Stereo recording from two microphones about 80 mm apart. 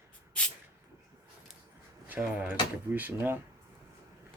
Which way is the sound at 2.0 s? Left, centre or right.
Right.